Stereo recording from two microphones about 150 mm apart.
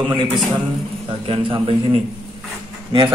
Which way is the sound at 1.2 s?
35° right (ahead or behind).